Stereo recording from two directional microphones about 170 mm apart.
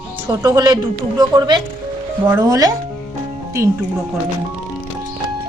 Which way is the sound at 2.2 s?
15° right (ahead or behind).